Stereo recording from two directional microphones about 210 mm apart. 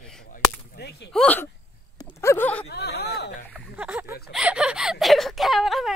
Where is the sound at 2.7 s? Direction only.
50° left (ahead or behind).